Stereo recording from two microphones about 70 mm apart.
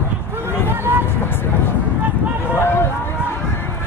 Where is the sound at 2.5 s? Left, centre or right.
Left.